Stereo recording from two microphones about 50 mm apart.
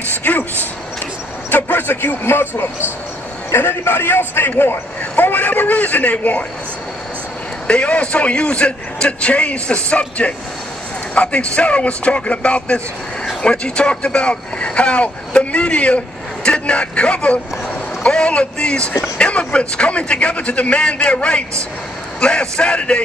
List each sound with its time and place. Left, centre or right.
0.1 s a sound: left
1.5 s a man's voice: left
7.6 s speech: left